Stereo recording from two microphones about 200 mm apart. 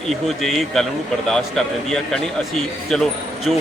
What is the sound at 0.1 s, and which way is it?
A man's voice, centre (ahead or behind).